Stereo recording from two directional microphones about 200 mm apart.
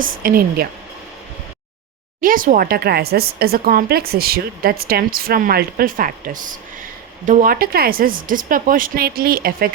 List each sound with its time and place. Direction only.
0.0 s a woman's voice: 45° right (ahead or behind)
2.2 s a woman's voice: 45° right (ahead or behind)